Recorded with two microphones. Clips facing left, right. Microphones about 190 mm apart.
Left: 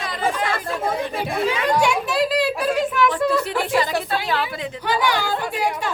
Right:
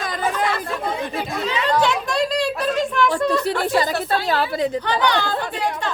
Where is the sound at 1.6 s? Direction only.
10° left (ahead or behind).